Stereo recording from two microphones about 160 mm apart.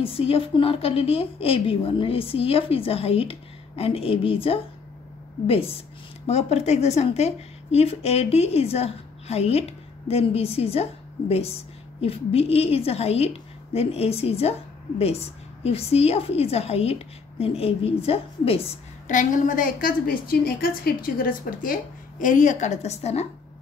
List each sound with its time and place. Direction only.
0.0 s a woman's voice: 35° left (ahead or behind)